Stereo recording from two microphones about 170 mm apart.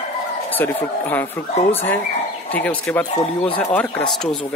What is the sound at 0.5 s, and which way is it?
Speech, 10° left (ahead or behind).